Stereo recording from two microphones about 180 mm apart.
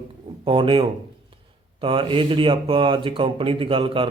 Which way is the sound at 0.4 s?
30° right (ahead or behind).